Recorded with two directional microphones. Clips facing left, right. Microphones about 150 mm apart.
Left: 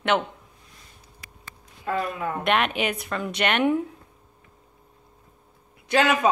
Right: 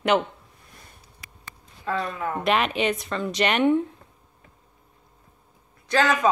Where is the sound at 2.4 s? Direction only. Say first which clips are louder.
Right 1 dB; centre (ahead or behind).